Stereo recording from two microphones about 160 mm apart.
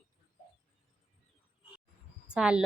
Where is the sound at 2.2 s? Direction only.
5° right (ahead or behind).